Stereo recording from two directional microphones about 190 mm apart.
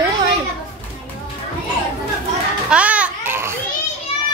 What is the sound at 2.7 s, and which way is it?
Babbling, 5° right (ahead or behind).